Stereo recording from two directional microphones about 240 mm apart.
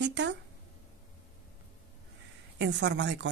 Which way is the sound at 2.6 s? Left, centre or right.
Right.